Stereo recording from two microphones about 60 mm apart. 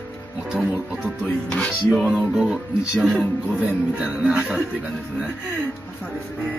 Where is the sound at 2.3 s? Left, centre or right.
Centre.